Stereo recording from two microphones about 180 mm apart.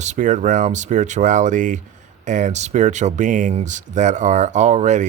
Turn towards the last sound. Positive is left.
turn(degrees=-40)  # may be behind; listen again after turning